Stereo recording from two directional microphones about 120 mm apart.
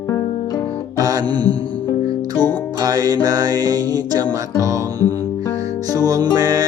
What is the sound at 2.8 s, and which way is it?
Music, 30° right (ahead or behind).